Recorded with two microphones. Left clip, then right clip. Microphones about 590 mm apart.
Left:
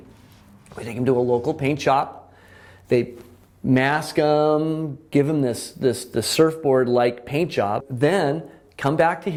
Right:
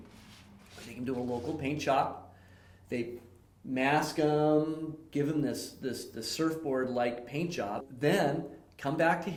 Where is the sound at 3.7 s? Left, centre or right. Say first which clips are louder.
Left 9 dB; left.